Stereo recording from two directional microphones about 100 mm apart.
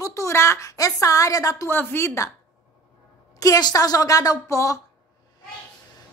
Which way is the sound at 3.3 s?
40° left (ahead or behind).